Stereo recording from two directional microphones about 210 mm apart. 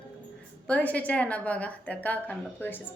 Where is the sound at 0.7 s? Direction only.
5° left (ahead or behind).